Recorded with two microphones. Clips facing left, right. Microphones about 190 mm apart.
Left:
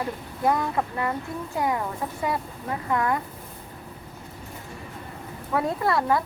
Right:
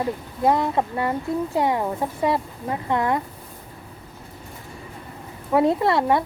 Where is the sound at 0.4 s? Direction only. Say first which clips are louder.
Right 4 dB; 25° right (ahead or behind).